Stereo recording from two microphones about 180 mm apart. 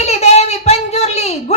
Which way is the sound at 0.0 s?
40° left (ahead or behind).